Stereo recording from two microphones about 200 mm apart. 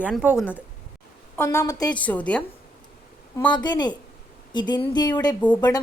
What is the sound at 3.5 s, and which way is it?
Speech, 20° left (ahead or behind).